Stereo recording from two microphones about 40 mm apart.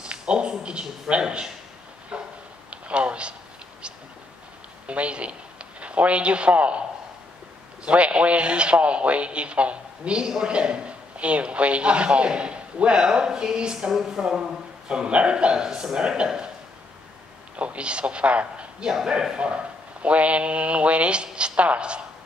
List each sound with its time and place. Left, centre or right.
0.0 s speech: right
2.1 s a sound: right
2.7 s speech: right
4.8 s speech: right
7.8 s speech: right
17.6 s a man's voice: right
18.9 s speech: centre